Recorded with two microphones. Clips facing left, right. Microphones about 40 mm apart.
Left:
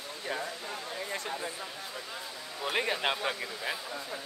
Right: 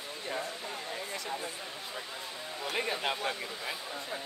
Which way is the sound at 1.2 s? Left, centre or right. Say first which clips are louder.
Left 1 dB; left.